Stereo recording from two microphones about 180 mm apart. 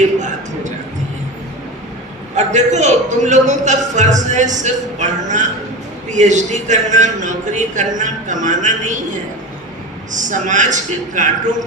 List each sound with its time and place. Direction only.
2.3 s a man's voice: 40° right (ahead or behind)
10.1 s a man's voice: 45° right (ahead or behind)